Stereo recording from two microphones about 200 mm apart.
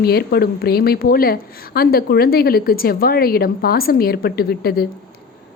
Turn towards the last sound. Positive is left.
turn(degrees=50)  # may be behind; listen again after turning